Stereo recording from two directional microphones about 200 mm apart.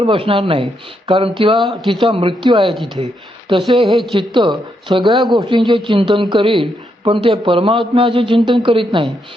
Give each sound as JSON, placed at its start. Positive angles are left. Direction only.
{"t": 0.0, "sound": "speech", "side_deg": -25}
{"t": 1.5, "sound": "speech", "side_deg": 0}
{"t": 2.0, "sound": "speech", "side_deg": -25}
{"t": 2.7, "sound": "speech", "side_deg": 0}
{"t": 3.5, "sound": "speech", "side_deg": -25}
{"t": 3.8, "sound": "speech", "side_deg": 0}
{"t": 4.1, "sound": "speech", "side_deg": -25}
{"t": 5.1, "sound": "speech", "side_deg": 0}
{"t": 5.4, "sound": "speech", "side_deg": -25}